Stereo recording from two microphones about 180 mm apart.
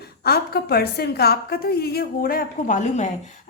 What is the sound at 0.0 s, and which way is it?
A woman's voice, 60° left (ahead or behind).